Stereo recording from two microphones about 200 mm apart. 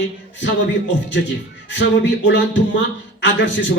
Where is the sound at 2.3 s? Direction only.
65° left (ahead or behind).